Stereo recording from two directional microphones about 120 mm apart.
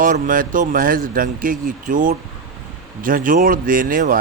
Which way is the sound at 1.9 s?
90° right.